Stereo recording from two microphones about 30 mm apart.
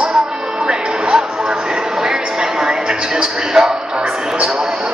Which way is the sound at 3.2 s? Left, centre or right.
Right.